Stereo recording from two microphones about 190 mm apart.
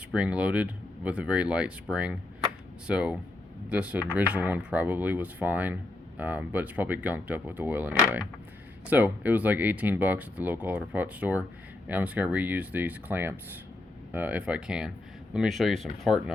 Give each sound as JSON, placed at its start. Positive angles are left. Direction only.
{"t": 0.1, "sound": "speech", "side_deg": -5}